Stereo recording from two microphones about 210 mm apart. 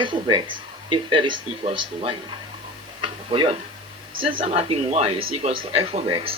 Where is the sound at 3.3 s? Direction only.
25° right (ahead or behind).